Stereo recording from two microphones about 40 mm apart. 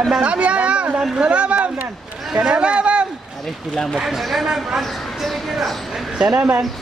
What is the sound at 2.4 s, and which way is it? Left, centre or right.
Speech, right.